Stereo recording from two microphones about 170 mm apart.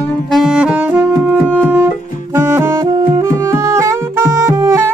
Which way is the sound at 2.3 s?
20° right (ahead or behind).